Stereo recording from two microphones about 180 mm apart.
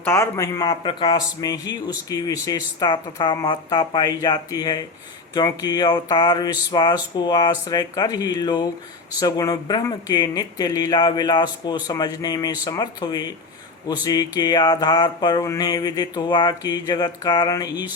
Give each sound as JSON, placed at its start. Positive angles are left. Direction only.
{"t": 0.0, "sound": "speech", "side_deg": 15}